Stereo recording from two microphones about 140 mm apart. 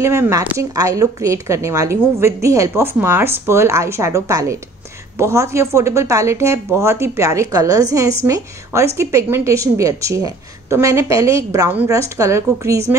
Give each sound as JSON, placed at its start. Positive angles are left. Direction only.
{"t": 0.0, "sound": "a woman's voice", "side_deg": -20}